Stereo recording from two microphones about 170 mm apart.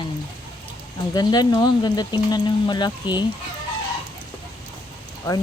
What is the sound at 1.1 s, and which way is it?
Speech, 25° left (ahead or behind).